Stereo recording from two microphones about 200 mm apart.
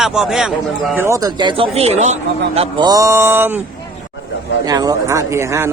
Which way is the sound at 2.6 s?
20° right (ahead or behind).